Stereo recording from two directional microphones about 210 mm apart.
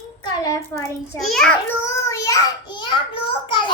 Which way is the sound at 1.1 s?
Centre (ahead or behind).